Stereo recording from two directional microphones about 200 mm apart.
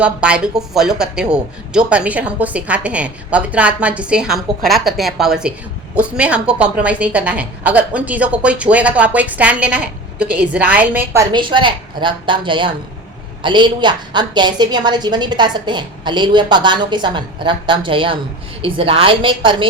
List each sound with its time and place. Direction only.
0.0 s a woman's voice: 5° right (ahead or behind); by 19.6 s 25° right (ahead or behind)